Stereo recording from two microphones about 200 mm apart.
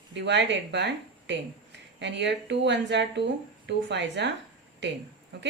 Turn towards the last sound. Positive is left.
turn(degrees=-60)  # may be behind; listen again after turning